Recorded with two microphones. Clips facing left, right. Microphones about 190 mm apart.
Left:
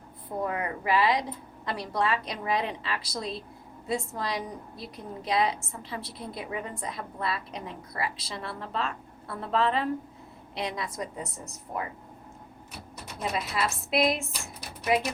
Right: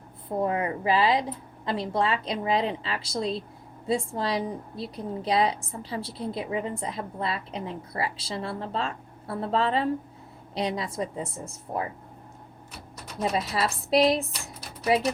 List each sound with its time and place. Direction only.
0.3 s a woman's voice: 25° right (ahead or behind)
13.3 s speech: 30° right (ahead or behind)